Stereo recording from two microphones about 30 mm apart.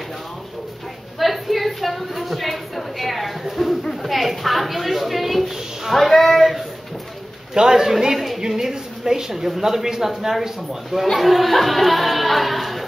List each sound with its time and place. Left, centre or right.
1.2 s a woman's voice: centre
3.6 s a sound: centre
4.0 s a sound: centre
7.5 s a man's voice: centre
8.0 s a woman's voice: centre
11.1 s speech: centre